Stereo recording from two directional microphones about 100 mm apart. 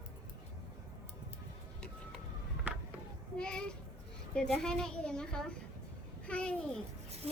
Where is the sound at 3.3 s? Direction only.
10° left (ahead or behind).